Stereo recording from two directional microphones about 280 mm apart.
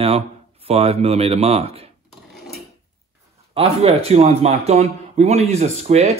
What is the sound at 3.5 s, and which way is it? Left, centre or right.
Speech, right.